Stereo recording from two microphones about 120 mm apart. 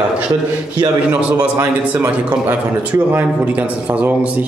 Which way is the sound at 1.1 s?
10° right (ahead or behind).